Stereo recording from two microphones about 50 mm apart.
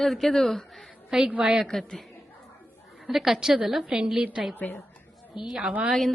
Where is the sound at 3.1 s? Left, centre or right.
Centre.